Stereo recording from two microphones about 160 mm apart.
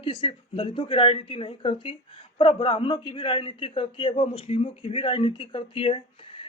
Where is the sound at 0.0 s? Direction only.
35° left (ahead or behind).